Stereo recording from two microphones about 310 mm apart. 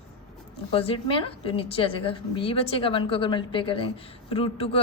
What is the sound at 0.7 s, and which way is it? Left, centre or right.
A woman's voice, centre.